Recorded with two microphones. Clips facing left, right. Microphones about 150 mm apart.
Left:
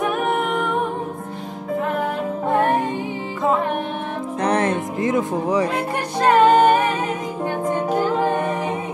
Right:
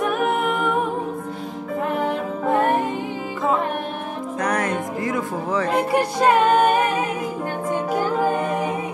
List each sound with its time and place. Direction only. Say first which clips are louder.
0.0 s a capella: even; centre (ahead or behind)
4.4 s music: left 3 dB; 25° left (ahead or behind)
5.7 s music: right 4 dB; 10° right (ahead or behind)